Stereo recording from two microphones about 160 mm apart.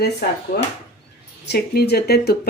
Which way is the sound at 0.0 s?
80° left.